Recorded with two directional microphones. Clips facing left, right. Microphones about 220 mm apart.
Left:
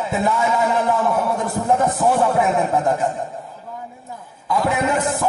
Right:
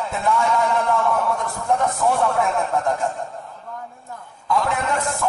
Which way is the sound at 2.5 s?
20° left (ahead or behind).